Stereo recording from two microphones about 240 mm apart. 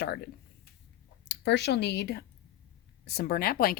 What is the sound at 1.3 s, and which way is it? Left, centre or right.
A woman's voice, left.